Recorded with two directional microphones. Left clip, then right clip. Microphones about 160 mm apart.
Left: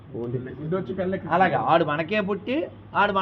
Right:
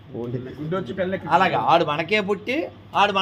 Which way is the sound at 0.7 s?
30° right (ahead or behind).